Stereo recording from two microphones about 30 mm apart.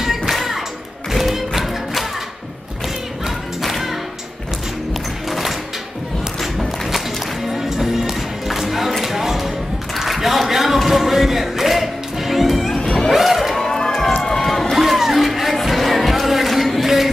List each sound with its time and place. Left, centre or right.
0.3 s music: centre
3.6 s music: centre
7.4 s music: centre
9.9 s a sound: centre
13.1 s vehicle: centre
13.6 s music: left
14.4 s run: centre
14.8 s music: centre